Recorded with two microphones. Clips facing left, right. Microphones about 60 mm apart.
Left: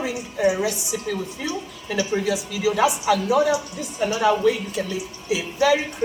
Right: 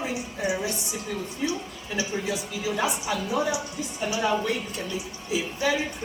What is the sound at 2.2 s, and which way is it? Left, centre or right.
A woman's voice, left.